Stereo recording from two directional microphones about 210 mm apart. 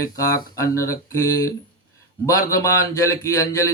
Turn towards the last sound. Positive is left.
turn(degrees=15)  # may be behind; listen again after turning